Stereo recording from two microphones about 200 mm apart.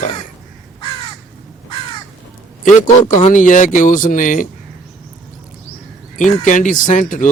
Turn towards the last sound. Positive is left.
turn(degrees=40)  # may be behind; listen again after turning